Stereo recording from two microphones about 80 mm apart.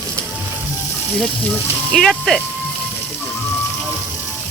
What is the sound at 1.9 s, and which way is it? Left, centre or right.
Speech, centre.